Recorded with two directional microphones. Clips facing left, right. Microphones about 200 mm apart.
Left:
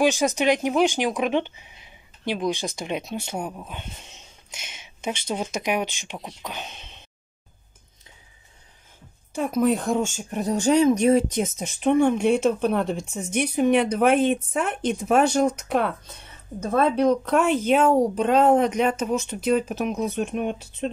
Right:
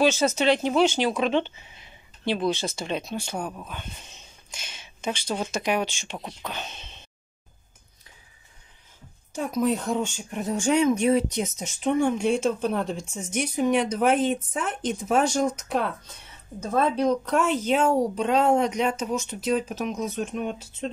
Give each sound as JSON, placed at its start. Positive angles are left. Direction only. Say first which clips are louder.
{"t": 0.0, "sound": "speech", "louder": "left 1 dB", "side_deg": 15}
{"t": 9.3, "sound": "speech", "louder": "left 3 dB", "side_deg": 60}